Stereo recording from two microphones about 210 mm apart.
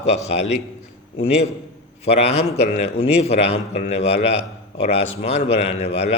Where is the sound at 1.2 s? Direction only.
30° left (ahead or behind).